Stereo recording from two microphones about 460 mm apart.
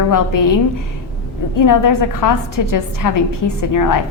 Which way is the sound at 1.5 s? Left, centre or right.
Left.